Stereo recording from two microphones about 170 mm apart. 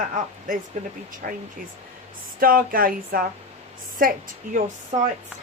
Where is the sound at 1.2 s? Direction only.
55° right (ahead or behind).